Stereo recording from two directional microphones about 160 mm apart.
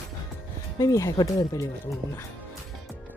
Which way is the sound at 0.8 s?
20° left (ahead or behind).